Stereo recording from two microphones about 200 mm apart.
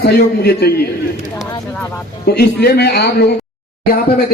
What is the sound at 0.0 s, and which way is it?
Speech, 50° left (ahead or behind).